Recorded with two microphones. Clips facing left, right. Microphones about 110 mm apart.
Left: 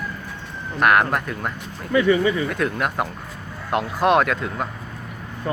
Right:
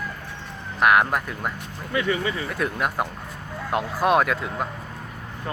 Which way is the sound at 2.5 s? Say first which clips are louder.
Left 2 dB; 10° right (ahead or behind).